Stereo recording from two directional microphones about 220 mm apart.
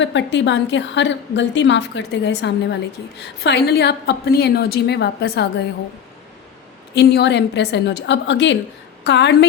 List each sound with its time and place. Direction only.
0.0 s a woman's voice: 55° left (ahead or behind)
6.9 s a woman's voice: 50° left (ahead or behind)